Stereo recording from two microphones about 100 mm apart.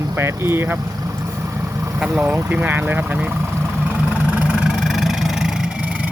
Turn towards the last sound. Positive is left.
turn(degrees=-5)  # may be behind; listen again after turning